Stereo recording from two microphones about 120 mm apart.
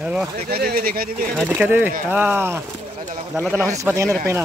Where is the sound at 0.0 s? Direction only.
5° right (ahead or behind).